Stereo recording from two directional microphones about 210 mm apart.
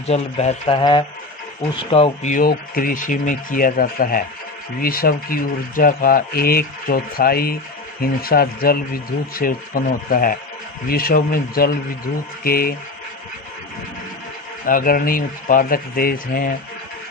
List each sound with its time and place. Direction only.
0.1 s speech: 30° left (ahead or behind)
14.7 s speech: 40° left (ahead or behind)